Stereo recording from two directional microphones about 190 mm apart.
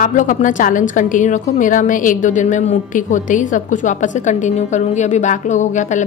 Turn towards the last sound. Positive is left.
turn(degrees=40)  # may be behind; listen again after turning